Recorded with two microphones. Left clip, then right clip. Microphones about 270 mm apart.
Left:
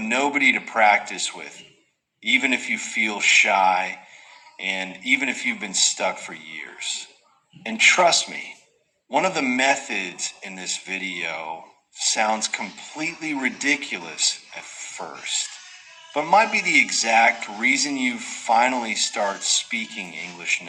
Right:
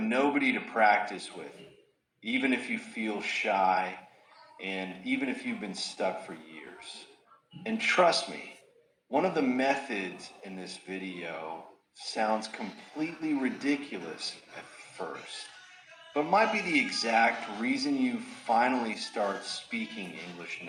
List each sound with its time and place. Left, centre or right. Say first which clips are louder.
0.1 s a man's voice: left 9 dB; left
15.0 s a man's voice: left 10 dB; left